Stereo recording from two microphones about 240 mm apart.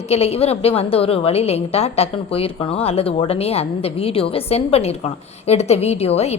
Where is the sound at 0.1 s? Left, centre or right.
Left.